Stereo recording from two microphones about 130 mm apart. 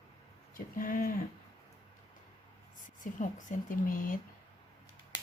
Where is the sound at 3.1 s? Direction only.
90° left.